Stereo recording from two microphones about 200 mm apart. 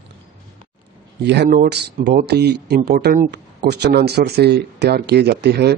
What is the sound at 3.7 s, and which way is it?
A man's voice, 55° right (ahead or behind).